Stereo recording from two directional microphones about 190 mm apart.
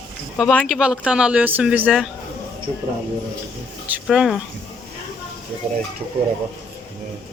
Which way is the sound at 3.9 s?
5° right (ahead or behind).